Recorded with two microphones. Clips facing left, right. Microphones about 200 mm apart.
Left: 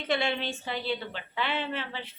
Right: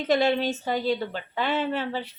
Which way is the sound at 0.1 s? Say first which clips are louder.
Right 7 dB; 40° right (ahead or behind).